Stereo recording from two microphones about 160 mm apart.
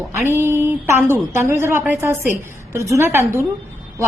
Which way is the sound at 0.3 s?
15° right (ahead or behind).